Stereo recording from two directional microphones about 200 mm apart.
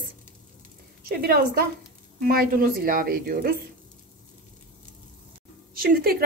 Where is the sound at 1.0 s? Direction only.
50° right (ahead or behind).